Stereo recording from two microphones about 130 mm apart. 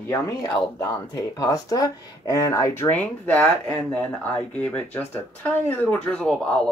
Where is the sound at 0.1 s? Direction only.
30° left (ahead or behind).